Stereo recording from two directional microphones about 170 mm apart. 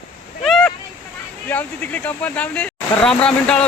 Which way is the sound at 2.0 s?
10° left (ahead or behind).